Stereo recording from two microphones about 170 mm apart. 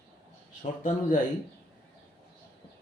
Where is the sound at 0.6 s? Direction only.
50° left (ahead or behind).